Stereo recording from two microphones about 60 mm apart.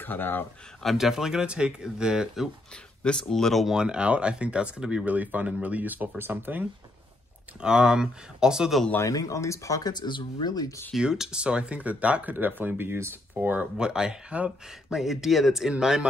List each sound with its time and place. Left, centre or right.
0.0 s speech: left
0.8 s speech: centre
3.0 s speech: centre
3.6 s speech: centre; by 6.7 s right
7.6 s speech: centre
9.0 s speech: left
11.0 s speech: centre; by 13.1 s right
13.3 s speech: right
13.7 s speech: centre
15.0 s speech: centre